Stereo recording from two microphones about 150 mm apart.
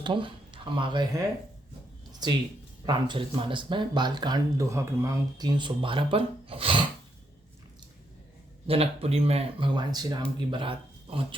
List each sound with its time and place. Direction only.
0.0 s speech: 35° right (ahead or behind)
2.2 s speech: 25° right (ahead or behind)
8.6 s speech: 40° right (ahead or behind)